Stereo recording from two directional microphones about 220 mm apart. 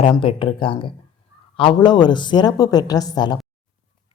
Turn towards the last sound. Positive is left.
turn(degrees=20)  # may be behind; listen again after turning